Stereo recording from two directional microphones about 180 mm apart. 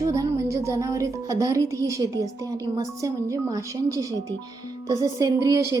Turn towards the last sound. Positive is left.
turn(degrees=-20)  # may be behind; listen again after turning